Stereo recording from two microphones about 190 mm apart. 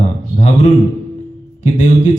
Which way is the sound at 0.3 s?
35° left (ahead or behind).